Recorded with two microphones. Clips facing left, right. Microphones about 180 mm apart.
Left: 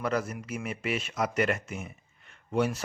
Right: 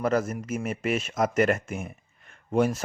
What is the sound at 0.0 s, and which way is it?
Speech, 45° right (ahead or behind).